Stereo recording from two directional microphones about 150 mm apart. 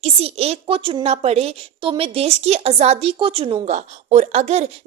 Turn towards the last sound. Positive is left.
turn(degrees=-45)  # may be behind; listen again after turning